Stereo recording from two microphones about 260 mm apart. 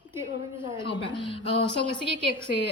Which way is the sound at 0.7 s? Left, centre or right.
Centre.